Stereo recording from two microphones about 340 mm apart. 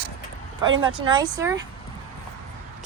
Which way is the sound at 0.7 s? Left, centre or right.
Right.